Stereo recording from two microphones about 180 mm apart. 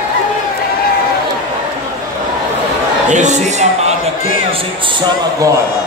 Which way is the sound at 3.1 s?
40° right (ahead or behind).